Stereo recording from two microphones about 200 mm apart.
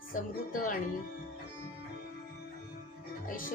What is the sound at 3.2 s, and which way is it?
Music, 45° left (ahead or behind).